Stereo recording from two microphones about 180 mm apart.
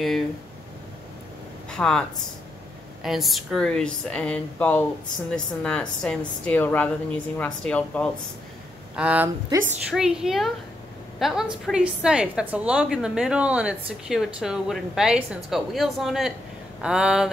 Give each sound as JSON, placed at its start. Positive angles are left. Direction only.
{"t": 1.7, "sound": "a woman's voice", "side_deg": 5}
{"t": 8.9, "sound": "a woman's voice", "side_deg": -5}